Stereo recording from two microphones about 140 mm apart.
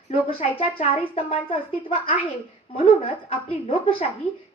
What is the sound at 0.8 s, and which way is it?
Speech, 50° left (ahead or behind).